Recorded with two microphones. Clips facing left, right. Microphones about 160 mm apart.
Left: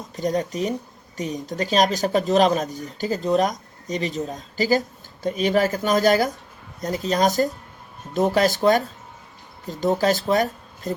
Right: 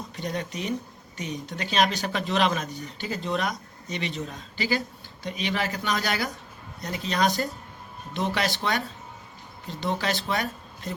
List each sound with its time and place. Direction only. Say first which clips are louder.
0.2 s speech: left 9 dB; 40° left (ahead or behind)